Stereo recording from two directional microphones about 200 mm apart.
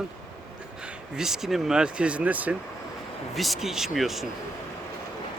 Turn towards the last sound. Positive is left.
turn(degrees=0)  # may be behind; listen again after turning